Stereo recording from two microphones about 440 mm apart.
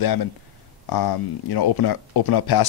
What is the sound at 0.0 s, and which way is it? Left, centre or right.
Speech, left.